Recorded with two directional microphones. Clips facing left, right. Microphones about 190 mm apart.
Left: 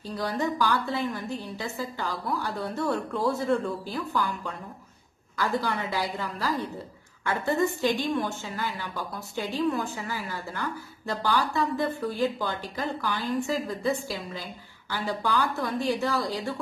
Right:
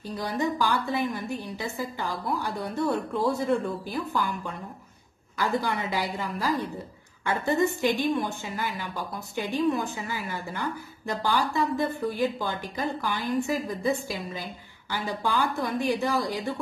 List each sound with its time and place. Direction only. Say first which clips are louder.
0.2 s a woman's voice: even; 15° right (ahead or behind)
5.4 s a woman's voice: right 1 dB; 15° right (ahead or behind)